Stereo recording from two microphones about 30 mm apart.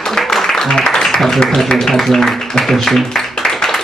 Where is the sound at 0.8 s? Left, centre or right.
Left.